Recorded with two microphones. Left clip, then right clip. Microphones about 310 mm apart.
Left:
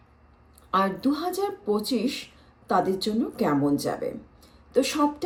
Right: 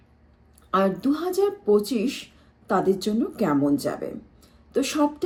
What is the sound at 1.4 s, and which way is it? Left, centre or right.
A woman's voice, centre.